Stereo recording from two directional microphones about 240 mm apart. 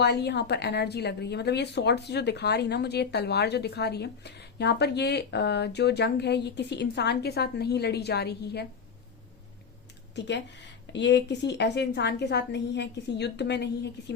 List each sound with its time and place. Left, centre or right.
0.0 s a woman's voice: left
10.2 s a woman's voice: left